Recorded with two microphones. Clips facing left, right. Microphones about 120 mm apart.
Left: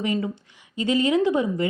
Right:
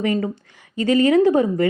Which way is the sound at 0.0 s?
50° right (ahead or behind).